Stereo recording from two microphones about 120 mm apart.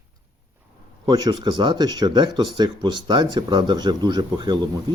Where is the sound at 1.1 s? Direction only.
35° right (ahead or behind).